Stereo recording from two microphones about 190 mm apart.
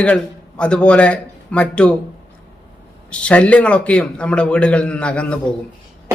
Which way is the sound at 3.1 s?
5° left (ahead or behind).